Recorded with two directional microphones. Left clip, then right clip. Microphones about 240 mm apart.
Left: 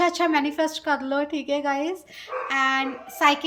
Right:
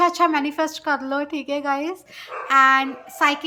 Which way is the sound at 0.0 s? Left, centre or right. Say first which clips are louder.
Right 3 dB; centre.